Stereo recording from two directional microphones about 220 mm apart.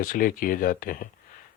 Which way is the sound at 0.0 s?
40° left (ahead or behind).